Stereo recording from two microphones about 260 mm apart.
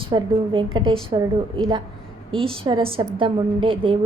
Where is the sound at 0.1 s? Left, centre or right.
Centre.